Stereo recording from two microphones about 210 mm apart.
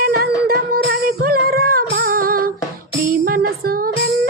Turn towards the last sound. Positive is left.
turn(degrees=-45)  # may be behind; listen again after turning